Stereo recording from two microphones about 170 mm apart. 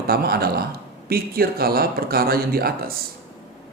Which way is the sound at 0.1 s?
65° right (ahead or behind).